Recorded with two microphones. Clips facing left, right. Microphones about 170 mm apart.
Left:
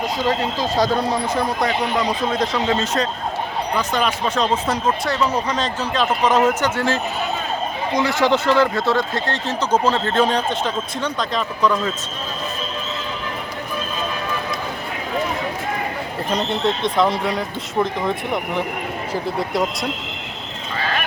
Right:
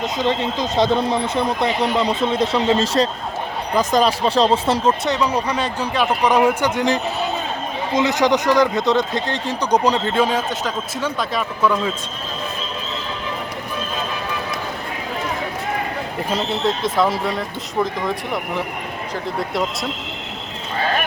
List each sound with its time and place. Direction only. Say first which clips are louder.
0.0 s speech: even; 20° right (ahead or behind)
10.2 s speech: left 1 dB; 5° right (ahead or behind)
16.3 s speech: left 1 dB; centre (ahead or behind)